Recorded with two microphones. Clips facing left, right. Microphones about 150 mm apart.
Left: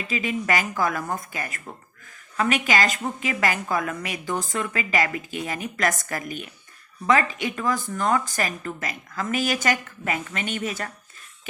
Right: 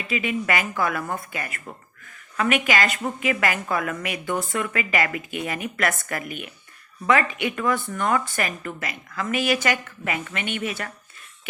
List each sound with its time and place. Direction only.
0.1 s a woman's voice: 35° left (ahead or behind)